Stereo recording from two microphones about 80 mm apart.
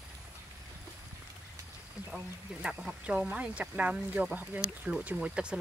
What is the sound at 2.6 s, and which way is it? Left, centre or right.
Speech, centre.